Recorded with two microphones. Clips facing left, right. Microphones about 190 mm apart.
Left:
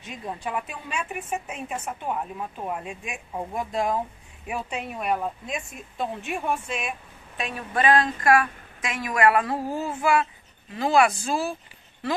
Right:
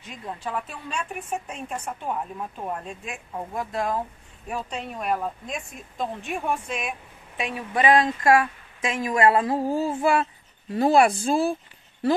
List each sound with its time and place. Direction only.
0.0 s a woman's voice: 15° left (ahead or behind)
4.5 s speech: 10° left (ahead or behind)
7.7 s speech: 20° right (ahead or behind)